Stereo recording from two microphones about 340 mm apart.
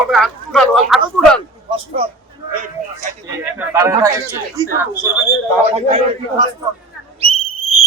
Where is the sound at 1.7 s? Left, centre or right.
Centre.